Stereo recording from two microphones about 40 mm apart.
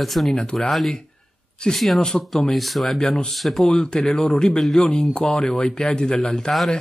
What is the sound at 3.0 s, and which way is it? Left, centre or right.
Speech, centre.